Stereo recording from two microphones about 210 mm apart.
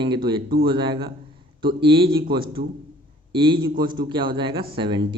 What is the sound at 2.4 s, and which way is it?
Speech, 45° right (ahead or behind).